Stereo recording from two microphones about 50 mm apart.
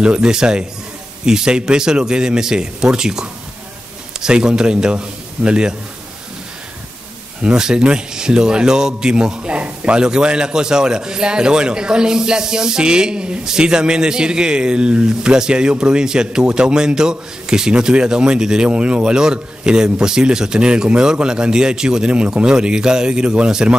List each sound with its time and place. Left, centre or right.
0.0 s speech: centre
7.4 s speech: centre